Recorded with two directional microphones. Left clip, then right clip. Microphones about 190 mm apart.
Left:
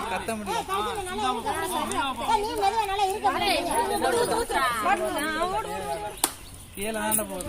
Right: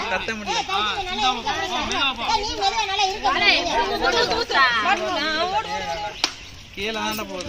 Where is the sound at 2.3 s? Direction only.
25° right (ahead or behind).